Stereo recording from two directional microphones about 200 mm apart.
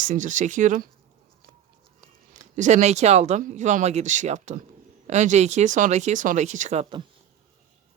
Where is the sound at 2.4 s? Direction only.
40° right (ahead or behind).